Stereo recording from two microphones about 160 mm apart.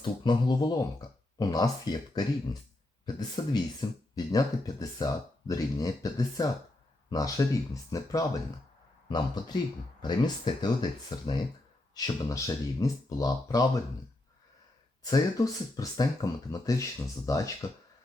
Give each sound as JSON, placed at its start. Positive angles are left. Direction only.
{"t": 0.0, "sound": "speech", "side_deg": 30}
{"t": 15.0, "sound": "speech", "side_deg": 25}